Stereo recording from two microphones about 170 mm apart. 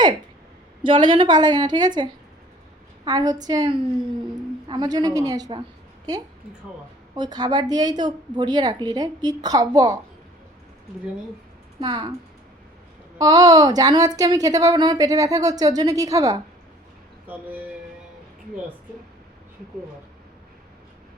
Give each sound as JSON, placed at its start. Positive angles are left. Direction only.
{"t": 0.8, "sound": "a woman's voice", "side_deg": -30}
{"t": 7.2, "sound": "a woman's voice", "side_deg": -25}
{"t": 11.8, "sound": "a woman's voice", "side_deg": -25}
{"t": 13.1, "sound": "a woman's voice", "side_deg": -20}